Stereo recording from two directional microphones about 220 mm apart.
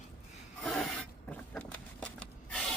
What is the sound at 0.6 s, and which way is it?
Filing, centre (ahead or behind).